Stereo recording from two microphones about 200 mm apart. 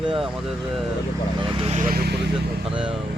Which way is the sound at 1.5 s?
35° right (ahead or behind).